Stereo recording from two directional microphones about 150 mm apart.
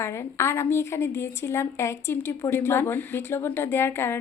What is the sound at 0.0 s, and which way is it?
A woman's voice, 15° left (ahead or behind).